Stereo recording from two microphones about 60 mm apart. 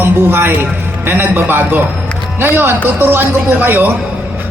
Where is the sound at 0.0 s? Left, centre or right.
Right.